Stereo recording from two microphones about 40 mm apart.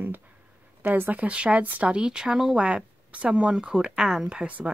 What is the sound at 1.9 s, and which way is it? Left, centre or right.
Speech, centre.